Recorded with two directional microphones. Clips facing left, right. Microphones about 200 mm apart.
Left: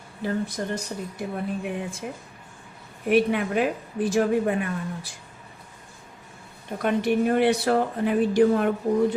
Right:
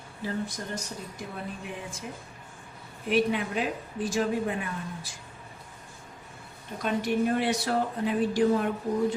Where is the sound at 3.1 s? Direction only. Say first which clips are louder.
Left 5 dB; 55° left (ahead or behind).